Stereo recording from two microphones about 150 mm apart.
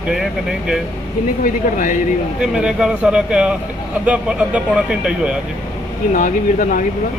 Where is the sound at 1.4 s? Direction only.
65° left (ahead or behind).